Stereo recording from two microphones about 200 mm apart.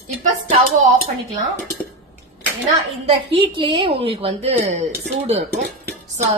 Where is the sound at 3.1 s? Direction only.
25° right (ahead or behind).